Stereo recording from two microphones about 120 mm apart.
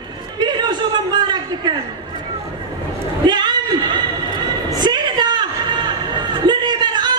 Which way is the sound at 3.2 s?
35° right (ahead or behind).